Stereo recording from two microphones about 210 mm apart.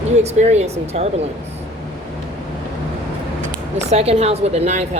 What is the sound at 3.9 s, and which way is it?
Speech, 30° right (ahead or behind).